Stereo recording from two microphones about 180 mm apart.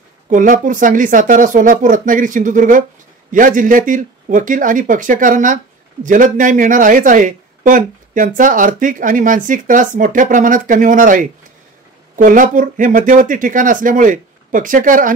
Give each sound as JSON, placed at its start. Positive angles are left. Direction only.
{"t": 0.3, "sound": "a woman's voice", "side_deg": -45}